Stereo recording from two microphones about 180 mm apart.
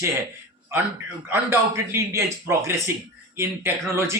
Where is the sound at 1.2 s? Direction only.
15° right (ahead or behind).